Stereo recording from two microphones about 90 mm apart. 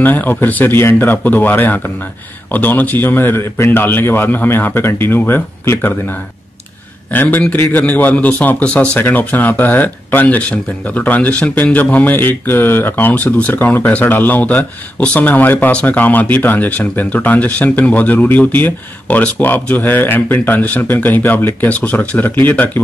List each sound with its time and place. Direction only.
0.0 s speech: 20° left (ahead or behind)